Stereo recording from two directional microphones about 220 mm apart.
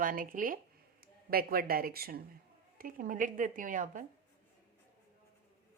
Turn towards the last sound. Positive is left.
turn(degrees=-35)  # may be behind; listen again after turning